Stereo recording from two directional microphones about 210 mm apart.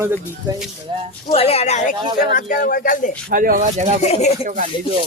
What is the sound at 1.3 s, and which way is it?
Speech, 30° left (ahead or behind).